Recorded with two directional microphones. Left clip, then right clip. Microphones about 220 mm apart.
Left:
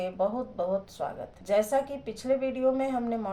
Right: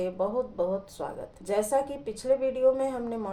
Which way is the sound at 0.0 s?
45° right (ahead or behind).